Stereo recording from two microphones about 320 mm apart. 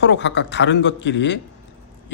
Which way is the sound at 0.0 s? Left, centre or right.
Left.